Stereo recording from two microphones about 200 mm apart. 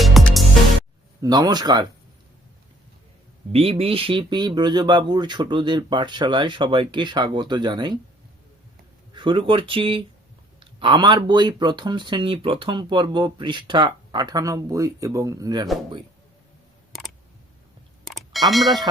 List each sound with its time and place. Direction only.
0.0 s music: centre (ahead or behind)
1.2 s speech: 20° right (ahead or behind)
3.5 s speech: 30° right (ahead or behind)
9.1 s speech: 25° right (ahead or behind)
18.0 s a sound: centre (ahead or behind)